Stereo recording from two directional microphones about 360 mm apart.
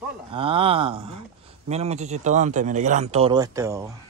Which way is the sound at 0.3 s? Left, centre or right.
Centre.